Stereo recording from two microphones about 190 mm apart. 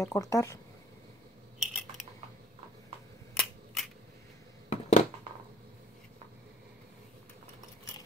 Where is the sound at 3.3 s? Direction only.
Centre (ahead or behind).